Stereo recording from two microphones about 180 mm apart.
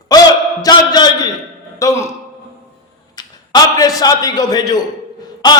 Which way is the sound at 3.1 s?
20° left (ahead or behind).